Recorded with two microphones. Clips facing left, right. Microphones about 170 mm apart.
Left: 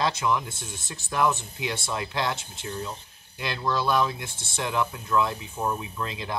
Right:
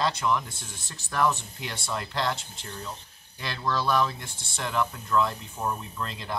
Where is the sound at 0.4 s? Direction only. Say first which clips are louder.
Left 3 dB; 25° left (ahead or behind).